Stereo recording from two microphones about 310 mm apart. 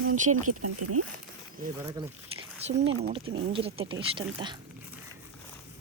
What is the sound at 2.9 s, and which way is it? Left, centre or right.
Speech, right.